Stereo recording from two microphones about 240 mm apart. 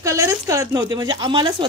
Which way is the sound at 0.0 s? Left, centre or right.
Centre.